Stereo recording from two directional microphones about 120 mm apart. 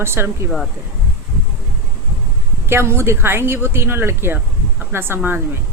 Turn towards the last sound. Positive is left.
turn(degrees=-20)  # may be behind; listen again after turning